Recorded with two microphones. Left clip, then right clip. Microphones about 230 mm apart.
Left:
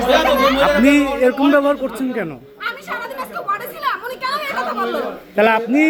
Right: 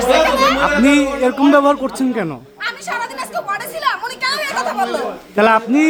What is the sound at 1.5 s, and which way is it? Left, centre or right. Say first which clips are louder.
A man's voice: right 3 dB; centre.